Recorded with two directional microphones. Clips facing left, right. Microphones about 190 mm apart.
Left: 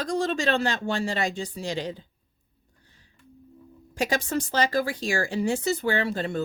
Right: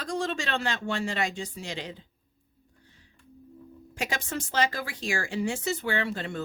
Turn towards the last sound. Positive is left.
turn(degrees=40)  # may be behind; listen again after turning